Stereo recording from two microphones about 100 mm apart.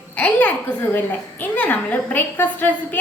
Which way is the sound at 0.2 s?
15° left (ahead or behind).